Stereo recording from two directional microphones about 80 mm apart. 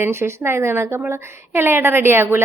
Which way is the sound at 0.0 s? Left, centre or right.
Right.